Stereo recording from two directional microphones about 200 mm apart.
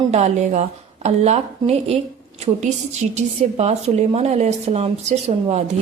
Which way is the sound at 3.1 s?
35° right (ahead or behind).